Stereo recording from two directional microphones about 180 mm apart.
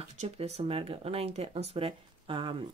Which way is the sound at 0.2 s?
35° right (ahead or behind).